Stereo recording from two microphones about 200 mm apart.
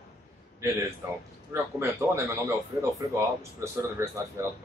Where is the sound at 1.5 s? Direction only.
15° right (ahead or behind).